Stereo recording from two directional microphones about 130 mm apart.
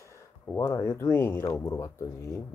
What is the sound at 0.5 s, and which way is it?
Speech, 20° left (ahead or behind).